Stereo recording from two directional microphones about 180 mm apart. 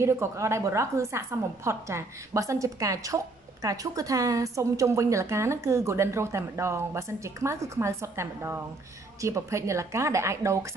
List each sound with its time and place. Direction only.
0.0 s a woman's voice: 15° right (ahead or behind)